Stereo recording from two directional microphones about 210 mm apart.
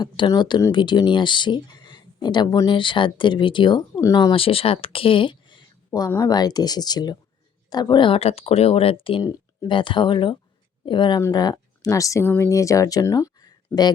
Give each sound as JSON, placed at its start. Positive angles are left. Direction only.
{"t": 0.0, "sound": "speech", "side_deg": 20}